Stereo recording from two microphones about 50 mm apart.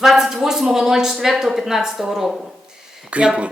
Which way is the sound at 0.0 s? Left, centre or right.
Centre.